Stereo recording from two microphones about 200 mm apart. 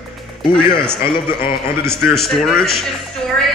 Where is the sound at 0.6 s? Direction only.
25° left (ahead or behind).